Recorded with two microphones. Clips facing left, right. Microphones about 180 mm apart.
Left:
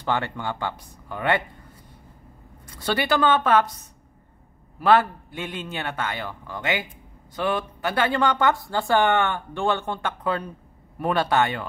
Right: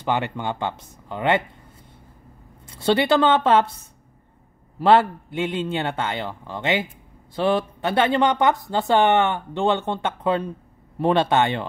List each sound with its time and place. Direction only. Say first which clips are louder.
0.0 s speech: right 2 dB; 20° right (ahead or behind)
2.6 s speech: right 6 dB; 25° right (ahead or behind)